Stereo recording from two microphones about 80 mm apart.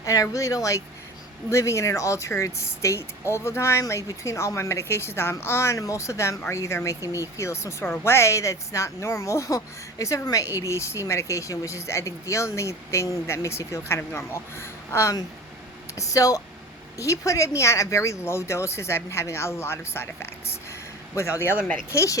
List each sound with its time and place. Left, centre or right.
0.0 s speech: left
21.2 s speech: left